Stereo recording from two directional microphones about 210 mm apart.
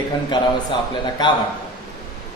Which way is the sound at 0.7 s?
20° left (ahead or behind).